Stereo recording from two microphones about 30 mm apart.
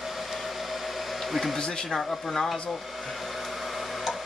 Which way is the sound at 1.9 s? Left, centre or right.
Centre.